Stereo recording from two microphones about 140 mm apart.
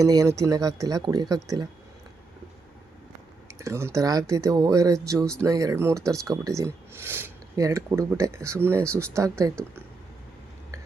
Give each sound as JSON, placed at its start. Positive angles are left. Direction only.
{"t": 0.0, "sound": "speech", "side_deg": -25}
{"t": 3.6, "sound": "speech", "side_deg": -20}